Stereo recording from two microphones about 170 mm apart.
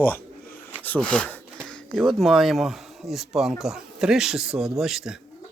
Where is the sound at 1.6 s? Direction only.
5° left (ahead or behind).